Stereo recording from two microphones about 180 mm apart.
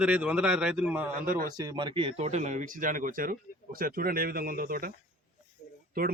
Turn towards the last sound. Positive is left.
turn(degrees=-55)  # may be behind; listen again after turning